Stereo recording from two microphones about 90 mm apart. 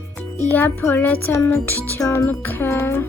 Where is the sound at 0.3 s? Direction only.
20° left (ahead or behind).